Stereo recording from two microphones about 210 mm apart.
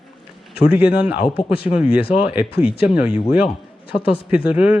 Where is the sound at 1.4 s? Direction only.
25° left (ahead or behind).